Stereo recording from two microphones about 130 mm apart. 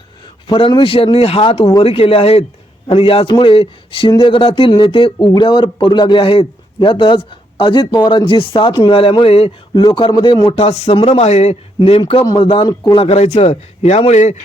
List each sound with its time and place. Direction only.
0.4 s a man's voice: 35° left (ahead or behind)
9.8 s speech: 35° left (ahead or behind)
10.5 s a man's voice: 45° left (ahead or behind)
13.1 s a man's voice: 55° left (ahead or behind)